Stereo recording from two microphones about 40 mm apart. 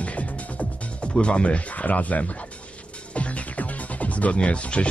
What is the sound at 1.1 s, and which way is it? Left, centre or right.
Speech, left.